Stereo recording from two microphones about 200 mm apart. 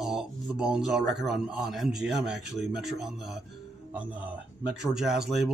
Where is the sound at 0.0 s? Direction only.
Centre (ahead or behind).